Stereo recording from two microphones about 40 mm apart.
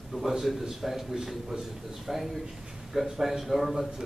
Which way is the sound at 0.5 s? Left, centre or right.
Centre.